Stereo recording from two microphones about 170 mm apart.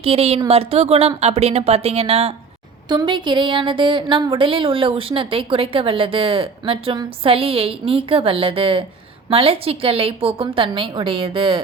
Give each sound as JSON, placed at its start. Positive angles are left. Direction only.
{"t": 0.0, "sound": "a woman's voice", "side_deg": -35}
{"t": 2.9, "sound": "a woman's voice", "side_deg": -25}